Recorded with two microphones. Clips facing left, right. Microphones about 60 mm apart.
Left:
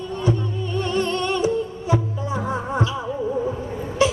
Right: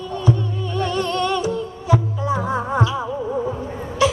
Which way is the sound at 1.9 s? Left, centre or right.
Right.